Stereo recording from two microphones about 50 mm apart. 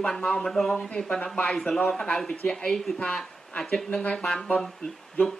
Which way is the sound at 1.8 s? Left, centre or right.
Left.